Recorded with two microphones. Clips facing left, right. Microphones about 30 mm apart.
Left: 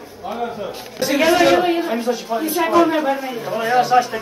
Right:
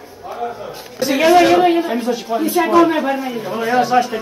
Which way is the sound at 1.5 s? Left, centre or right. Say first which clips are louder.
Right 4 dB; right.